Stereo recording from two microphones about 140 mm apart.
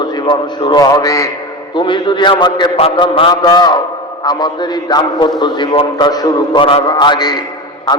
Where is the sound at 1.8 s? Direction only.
35° left (ahead or behind).